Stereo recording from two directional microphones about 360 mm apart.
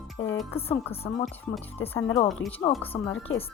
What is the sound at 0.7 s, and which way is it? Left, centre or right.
Speech, centre.